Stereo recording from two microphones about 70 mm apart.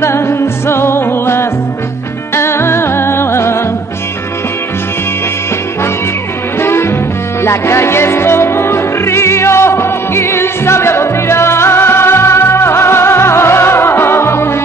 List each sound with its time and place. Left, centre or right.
0.0 s music: left
6.6 s music: left